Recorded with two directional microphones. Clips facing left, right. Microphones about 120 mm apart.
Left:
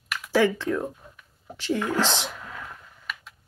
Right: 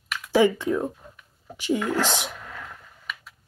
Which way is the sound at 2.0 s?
15° right (ahead or behind).